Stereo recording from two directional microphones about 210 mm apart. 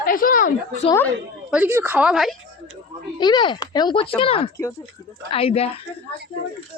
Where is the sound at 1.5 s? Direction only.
5° right (ahead or behind).